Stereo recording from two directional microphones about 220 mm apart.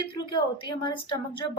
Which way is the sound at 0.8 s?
20° left (ahead or behind).